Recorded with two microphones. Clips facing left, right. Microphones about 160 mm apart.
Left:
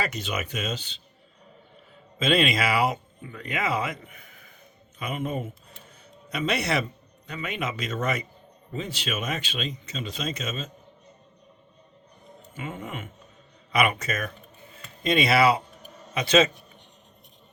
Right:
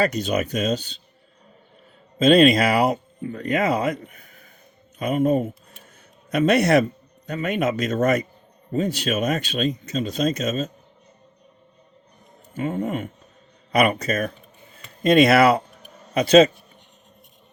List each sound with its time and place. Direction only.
0.0 s speech: 40° right (ahead or behind)
2.1 s speech: 40° right (ahead or behind)
4.0 s a sound: 40° right (ahead or behind)
4.9 s speech: 40° right (ahead or behind)
12.5 s speech: 40° right (ahead or behind)
15.0 s speech: 50° right (ahead or behind)